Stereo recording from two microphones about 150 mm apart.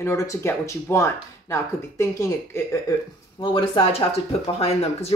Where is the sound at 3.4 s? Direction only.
35° left (ahead or behind).